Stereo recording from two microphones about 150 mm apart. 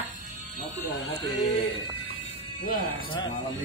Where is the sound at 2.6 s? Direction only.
75° left (ahead or behind).